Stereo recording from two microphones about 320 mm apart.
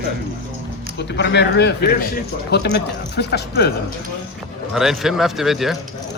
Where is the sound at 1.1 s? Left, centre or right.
Left.